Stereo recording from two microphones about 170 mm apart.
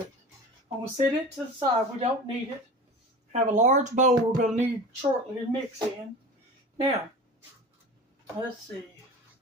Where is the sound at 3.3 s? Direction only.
45° right (ahead or behind).